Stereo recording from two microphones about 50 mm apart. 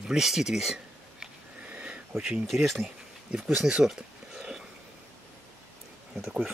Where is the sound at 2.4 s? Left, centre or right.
Centre.